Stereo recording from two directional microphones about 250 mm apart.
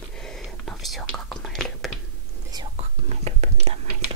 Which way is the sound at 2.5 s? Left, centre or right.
Right.